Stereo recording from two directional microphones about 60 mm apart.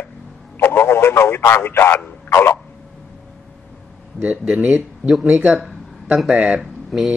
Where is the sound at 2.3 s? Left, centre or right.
Left.